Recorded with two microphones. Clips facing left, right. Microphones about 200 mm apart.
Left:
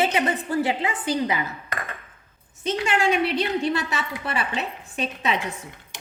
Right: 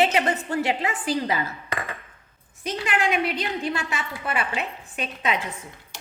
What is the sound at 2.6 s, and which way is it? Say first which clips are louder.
A woman's voice: left 3 dB; 30° left (ahead or behind).